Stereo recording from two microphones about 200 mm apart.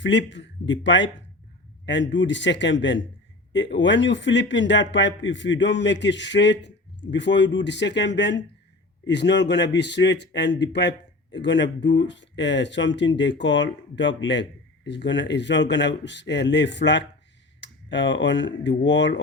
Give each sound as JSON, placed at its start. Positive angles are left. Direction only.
{"t": 0.0, "sound": "a man's voice", "side_deg": 65}